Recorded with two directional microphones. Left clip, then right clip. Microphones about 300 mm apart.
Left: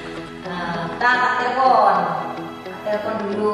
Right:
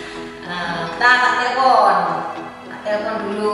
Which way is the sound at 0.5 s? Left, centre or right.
Centre.